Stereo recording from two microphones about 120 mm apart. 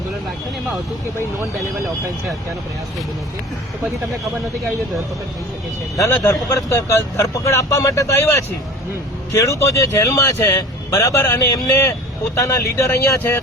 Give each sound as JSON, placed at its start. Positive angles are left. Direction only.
{"t": 6.0, "sound": "speech", "side_deg": 25}